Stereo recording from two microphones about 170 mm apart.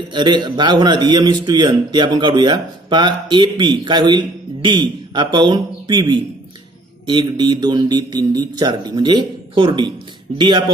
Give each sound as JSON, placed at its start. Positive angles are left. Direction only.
{"t": 0.1, "sound": "a man's voice", "side_deg": -25}
{"t": 7.1, "sound": "a man's voice", "side_deg": -25}